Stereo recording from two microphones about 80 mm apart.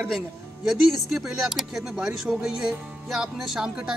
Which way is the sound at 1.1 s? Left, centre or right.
Centre.